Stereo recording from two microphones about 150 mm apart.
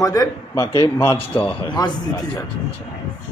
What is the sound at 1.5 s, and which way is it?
Speech, 30° left (ahead or behind).